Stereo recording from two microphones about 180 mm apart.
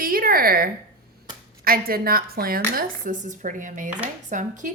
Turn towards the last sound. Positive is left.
turn(degrees=-45)  # may be behind; listen again after turning